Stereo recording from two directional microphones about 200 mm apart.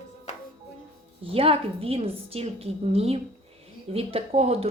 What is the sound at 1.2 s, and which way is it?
Speech, 30° right (ahead or behind).